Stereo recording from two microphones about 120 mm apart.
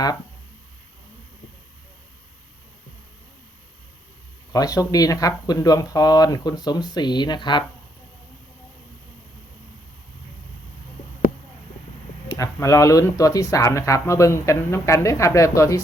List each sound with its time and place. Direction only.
4.5 s speech: 30° left (ahead or behind)
12.3 s speech: 25° left (ahead or behind)